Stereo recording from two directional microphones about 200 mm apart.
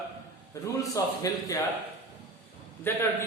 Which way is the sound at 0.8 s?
15° left (ahead or behind).